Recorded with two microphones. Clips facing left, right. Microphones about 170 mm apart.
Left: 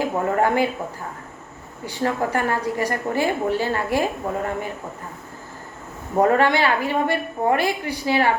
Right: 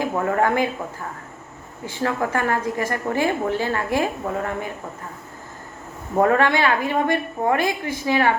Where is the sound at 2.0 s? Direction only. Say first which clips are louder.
Even; 40° left (ahead or behind).